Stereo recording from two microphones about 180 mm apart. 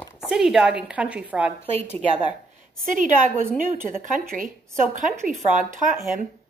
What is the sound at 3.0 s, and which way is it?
A woman's voice, 45° right (ahead or behind).